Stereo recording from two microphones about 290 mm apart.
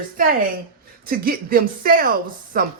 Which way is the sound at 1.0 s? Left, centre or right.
Right.